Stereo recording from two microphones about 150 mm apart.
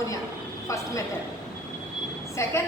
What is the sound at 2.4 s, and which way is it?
Speech, 20° left (ahead or behind).